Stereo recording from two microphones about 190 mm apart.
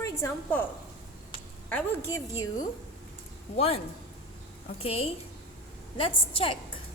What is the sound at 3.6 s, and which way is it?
A woman's voice, 30° left (ahead or behind).